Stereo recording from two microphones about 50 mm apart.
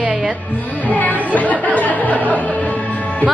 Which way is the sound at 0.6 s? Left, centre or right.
Left.